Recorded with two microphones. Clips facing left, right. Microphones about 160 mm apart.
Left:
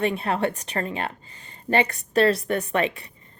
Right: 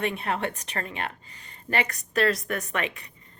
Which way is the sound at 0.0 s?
30° left (ahead or behind).